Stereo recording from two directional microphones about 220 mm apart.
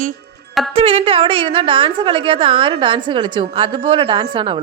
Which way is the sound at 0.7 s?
25° right (ahead or behind).